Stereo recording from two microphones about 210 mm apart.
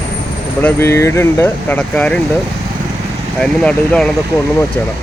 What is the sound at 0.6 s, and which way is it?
Speech, 15° left (ahead or behind).